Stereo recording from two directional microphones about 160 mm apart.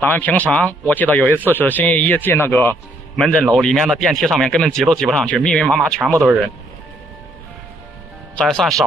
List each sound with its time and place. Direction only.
0.0 s a man's voice: 10° left (ahead or behind)
5.9 s speech: 20° right (ahead or behind)
8.4 s speech: 5° left (ahead or behind)